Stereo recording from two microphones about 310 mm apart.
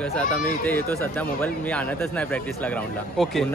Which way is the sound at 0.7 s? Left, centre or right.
Centre.